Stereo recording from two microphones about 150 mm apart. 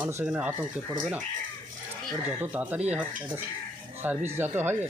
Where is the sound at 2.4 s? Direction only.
10° right (ahead or behind).